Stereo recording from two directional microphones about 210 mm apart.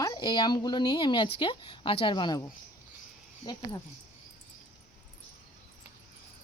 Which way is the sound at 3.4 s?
20° left (ahead or behind).